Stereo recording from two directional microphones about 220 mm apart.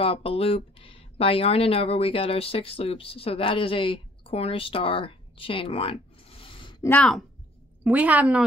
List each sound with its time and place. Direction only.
0.0 s speech: 25° left (ahead or behind)
6.9 s speech: 5° left (ahead or behind)
7.8 s speech: 5° right (ahead or behind)